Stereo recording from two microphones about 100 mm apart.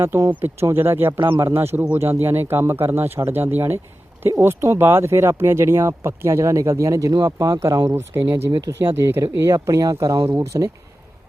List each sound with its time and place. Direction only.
0.0 s speech: 25° right (ahead or behind)
8.4 s speech: 45° right (ahead or behind)
8.8 s speech: 25° right (ahead or behind)